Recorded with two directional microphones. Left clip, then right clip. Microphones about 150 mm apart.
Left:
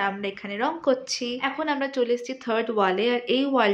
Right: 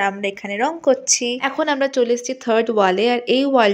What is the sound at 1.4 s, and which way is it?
A woman's voice, 50° right (ahead or behind).